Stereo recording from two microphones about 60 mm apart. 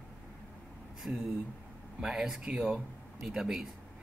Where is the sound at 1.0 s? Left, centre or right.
Right.